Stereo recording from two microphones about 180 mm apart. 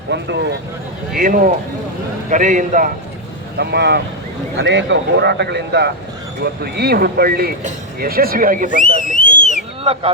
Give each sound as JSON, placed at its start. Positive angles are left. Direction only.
{"t": 0.1, "sound": "speech", "side_deg": -75}
{"t": 1.1, "sound": "a man's voice", "side_deg": -50}
{"t": 3.6, "sound": "speech", "side_deg": -70}
{"t": 8.7, "sound": "speech", "side_deg": 45}
{"t": 9.4, "sound": "a sound", "side_deg": 40}
{"t": 9.8, "sound": "speech", "side_deg": -35}